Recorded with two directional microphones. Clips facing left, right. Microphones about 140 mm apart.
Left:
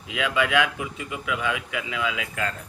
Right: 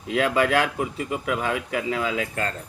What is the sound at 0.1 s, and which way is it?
A man's voice, 40° right (ahead or behind).